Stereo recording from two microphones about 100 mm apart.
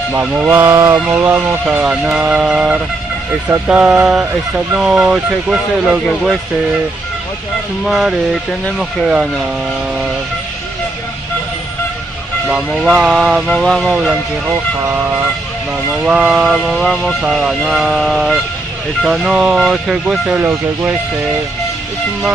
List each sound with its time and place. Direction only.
0.1 s speech: 20° right (ahead or behind)
0.9 s speech: 20° right (ahead or behind)
7.8 s speech: 5° right (ahead or behind)
12.4 s speech: 10° right (ahead or behind)
15.9 s speech: 10° right (ahead or behind)
20.3 s speech: 25° right (ahead or behind)